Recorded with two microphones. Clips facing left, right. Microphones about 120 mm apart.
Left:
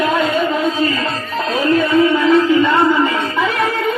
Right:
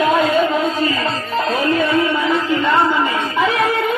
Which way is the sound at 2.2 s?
5° right (ahead or behind).